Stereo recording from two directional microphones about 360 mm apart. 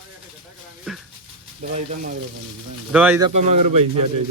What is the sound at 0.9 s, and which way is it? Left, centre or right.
Dog, centre.